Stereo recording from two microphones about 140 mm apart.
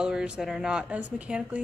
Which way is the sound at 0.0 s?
5° right (ahead or behind).